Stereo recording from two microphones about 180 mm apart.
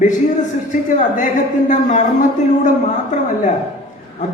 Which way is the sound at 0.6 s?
45° left (ahead or behind).